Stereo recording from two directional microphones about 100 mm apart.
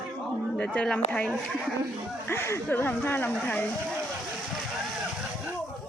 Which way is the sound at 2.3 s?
25° left (ahead or behind).